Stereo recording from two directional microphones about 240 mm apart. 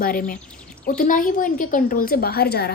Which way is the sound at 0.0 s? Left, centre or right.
Left.